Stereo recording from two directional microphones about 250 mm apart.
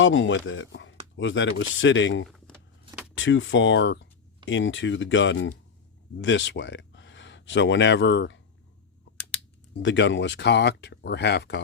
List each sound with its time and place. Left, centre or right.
0.0 s speech: left
9.8 s speech: left